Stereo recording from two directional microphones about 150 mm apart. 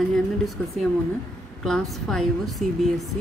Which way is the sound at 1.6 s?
5° left (ahead or behind).